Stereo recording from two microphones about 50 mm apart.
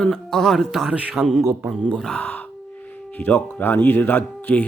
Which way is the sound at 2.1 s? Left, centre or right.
Left.